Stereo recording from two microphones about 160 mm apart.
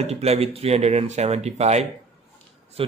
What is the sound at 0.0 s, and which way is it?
Speech, 40° right (ahead or behind).